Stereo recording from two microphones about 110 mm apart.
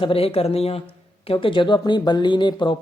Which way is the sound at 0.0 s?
60° left (ahead or behind).